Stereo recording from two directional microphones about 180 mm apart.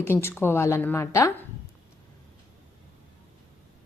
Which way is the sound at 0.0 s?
15° left (ahead or behind).